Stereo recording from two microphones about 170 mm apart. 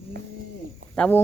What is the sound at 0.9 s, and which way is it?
Speech, 10° left (ahead or behind).